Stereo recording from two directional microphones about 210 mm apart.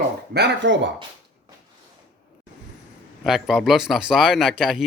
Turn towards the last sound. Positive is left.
turn(degrees=0)  # may be behind; listen again after turning